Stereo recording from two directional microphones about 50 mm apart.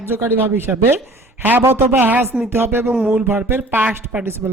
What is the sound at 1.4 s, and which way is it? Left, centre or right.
Speech, right.